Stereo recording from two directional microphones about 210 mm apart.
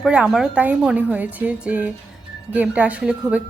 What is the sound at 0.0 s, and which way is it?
A woman's voice, 5° right (ahead or behind).